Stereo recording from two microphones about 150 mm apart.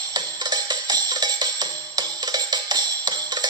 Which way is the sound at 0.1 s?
30° right (ahead or behind).